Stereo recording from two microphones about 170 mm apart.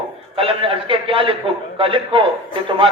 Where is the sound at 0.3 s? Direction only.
35° right (ahead or behind).